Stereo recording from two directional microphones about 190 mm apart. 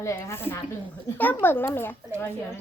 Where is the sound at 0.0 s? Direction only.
15° left (ahead or behind).